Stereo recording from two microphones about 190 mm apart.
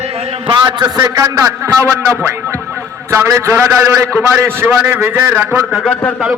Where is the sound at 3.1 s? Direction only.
15° right (ahead or behind).